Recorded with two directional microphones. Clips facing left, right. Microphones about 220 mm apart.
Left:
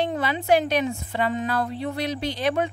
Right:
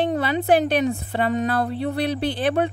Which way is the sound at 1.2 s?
60° right (ahead or behind).